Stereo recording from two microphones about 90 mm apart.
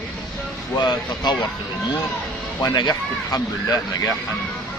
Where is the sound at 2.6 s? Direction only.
50° left (ahead or behind).